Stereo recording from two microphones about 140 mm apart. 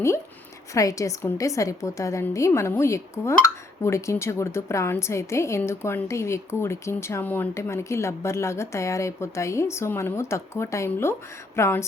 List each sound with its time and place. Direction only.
0.7 s a woman's voice: 25° left (ahead or behind)